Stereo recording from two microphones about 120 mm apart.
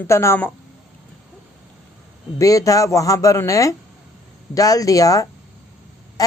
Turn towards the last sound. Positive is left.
turn(degrees=30)  # may be behind; listen again after turning